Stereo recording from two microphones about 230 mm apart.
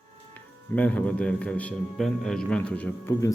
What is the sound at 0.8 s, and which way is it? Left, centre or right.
A man's voice, centre.